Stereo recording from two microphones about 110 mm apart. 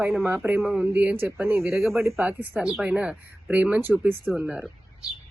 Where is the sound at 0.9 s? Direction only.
15° right (ahead or behind).